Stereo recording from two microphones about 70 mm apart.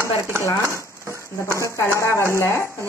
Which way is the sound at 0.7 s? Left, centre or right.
Right.